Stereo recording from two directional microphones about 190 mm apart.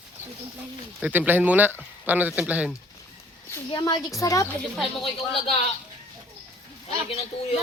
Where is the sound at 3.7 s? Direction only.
20° left (ahead or behind).